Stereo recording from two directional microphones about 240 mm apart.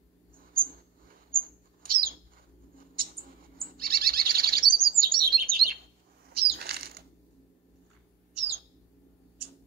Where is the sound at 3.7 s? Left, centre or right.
Right.